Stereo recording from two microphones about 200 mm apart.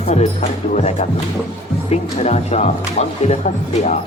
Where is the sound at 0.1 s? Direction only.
35° left (ahead or behind).